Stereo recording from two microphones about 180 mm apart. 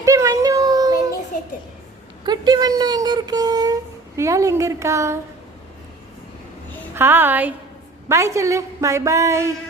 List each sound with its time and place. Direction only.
0.0 s a sound: 20° right (ahead or behind)
2.2 s a woman's voice: 25° right (ahead or behind)
6.9 s a woman's voice: 10° right (ahead or behind)